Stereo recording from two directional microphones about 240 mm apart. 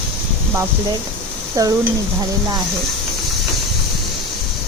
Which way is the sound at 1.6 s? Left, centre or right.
Centre.